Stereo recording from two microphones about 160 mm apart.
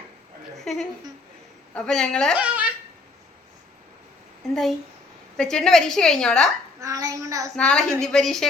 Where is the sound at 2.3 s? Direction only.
10° right (ahead or behind).